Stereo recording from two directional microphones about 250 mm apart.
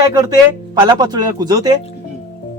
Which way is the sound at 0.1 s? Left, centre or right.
Centre.